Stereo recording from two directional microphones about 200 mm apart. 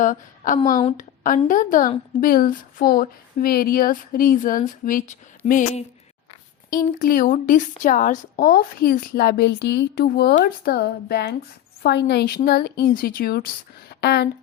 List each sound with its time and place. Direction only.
0.0 s a woman's voice: 40° left (ahead or behind); by 14.3 s 55° left (ahead or behind)